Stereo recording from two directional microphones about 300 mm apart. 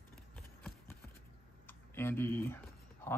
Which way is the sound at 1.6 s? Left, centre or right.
Centre.